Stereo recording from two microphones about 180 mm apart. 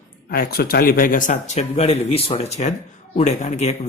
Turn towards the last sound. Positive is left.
turn(degrees=40)  # may be behind; listen again after turning